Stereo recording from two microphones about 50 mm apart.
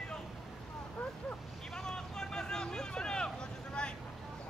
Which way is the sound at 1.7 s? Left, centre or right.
Centre.